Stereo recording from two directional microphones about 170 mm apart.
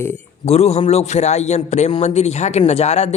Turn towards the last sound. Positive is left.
turn(degrees=40)  # may be behind; listen again after turning